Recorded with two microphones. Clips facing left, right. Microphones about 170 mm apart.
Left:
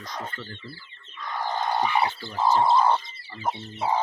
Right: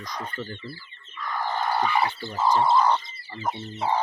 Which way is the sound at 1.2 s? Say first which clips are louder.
Right 1 dB; 15° left (ahead or behind).